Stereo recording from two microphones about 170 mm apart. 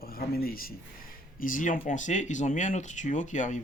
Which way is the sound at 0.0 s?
65° left (ahead or behind).